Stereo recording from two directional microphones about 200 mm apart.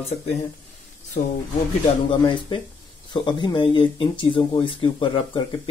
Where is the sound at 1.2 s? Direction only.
35° left (ahead or behind).